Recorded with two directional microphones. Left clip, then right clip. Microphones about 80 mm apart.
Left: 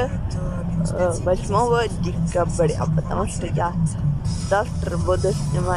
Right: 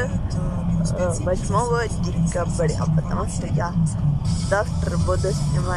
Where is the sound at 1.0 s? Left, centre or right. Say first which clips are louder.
Left 4 dB; centre.